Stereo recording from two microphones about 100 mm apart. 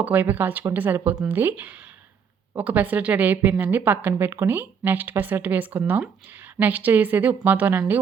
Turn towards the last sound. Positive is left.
turn(degrees=-15)  # may be behind; listen again after turning